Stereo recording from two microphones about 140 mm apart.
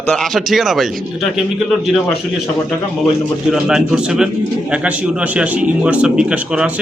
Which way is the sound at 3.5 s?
5° right (ahead or behind).